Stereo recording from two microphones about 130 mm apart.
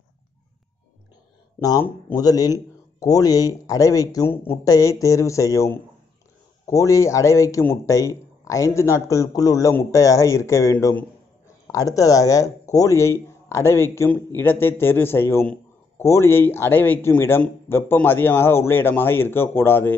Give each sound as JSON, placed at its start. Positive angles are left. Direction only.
{"t": 1.6, "sound": "a man's voice", "side_deg": 30}
{"t": 4.3, "sound": "a man's voice", "side_deg": 15}